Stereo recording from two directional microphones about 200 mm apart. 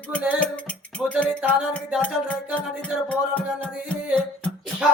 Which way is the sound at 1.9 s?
5° right (ahead or behind).